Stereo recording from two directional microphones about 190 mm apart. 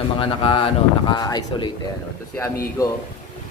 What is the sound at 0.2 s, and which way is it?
Speech, 25° left (ahead or behind).